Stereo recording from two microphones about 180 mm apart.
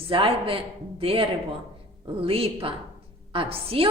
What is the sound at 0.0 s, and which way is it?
A woman's voice, 30° right (ahead or behind).